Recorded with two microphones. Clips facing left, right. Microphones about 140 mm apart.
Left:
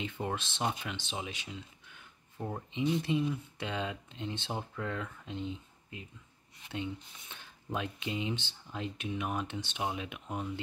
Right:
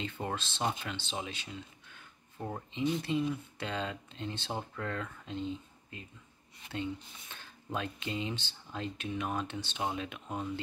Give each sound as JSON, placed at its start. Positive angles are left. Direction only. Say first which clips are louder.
{"t": 0.0, "sound": "speech", "louder": "left 1 dB", "side_deg": 10}
{"t": 2.3, "sound": "speech", "louder": "left 1 dB", "side_deg": 5}
{"t": 3.0, "sound": "speech", "louder": "left 1 dB", "side_deg": 15}